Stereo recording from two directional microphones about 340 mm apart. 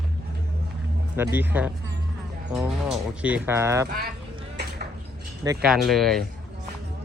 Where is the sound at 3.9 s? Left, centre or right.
Right.